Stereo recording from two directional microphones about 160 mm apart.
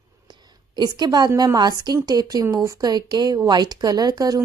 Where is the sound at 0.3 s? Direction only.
25° right (ahead or behind).